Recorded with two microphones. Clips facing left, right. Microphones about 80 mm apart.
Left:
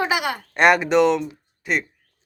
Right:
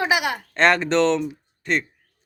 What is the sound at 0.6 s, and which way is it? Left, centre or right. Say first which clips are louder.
Speech: left 2 dB; centre.